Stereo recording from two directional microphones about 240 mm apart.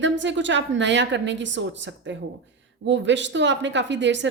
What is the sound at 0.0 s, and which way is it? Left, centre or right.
A woman's voice, right.